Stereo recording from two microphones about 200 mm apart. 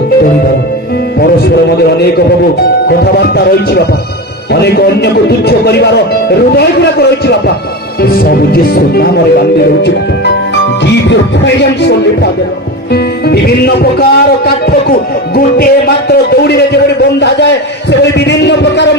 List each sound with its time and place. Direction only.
1.2 s a man's voice: 55° left (ahead or behind)
11.1 s a man's voice: 60° left (ahead or behind)